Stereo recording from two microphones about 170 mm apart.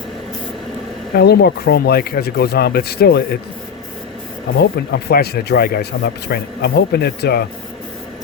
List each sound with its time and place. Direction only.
1.1 s speech: 70° left (ahead or behind)
4.5 s speech: 80° left